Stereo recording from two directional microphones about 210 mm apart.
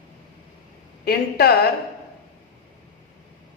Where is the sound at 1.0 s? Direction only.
45° left (ahead or behind).